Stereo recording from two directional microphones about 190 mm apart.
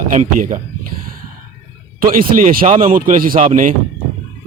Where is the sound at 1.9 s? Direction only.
50° right (ahead or behind).